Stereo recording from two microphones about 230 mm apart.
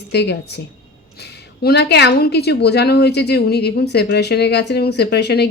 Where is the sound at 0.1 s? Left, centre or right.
Left.